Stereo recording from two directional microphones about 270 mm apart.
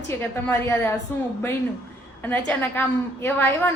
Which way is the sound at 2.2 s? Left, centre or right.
Centre.